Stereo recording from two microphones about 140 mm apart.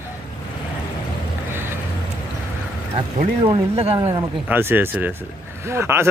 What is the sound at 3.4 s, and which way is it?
Speech, 45° right (ahead or behind).